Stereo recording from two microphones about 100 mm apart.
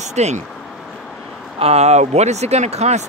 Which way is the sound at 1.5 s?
90° right.